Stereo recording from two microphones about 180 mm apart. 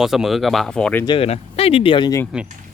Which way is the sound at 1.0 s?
30° left (ahead or behind).